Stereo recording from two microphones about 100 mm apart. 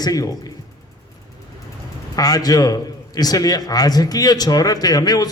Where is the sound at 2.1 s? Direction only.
40° left (ahead or behind).